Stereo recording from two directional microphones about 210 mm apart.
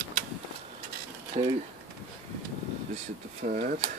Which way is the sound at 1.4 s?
30° right (ahead or behind).